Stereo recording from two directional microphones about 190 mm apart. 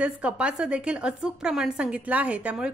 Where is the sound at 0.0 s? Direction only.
5° right (ahead or behind).